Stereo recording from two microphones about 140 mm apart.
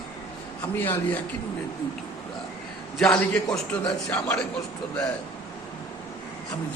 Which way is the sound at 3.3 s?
25° left (ahead or behind).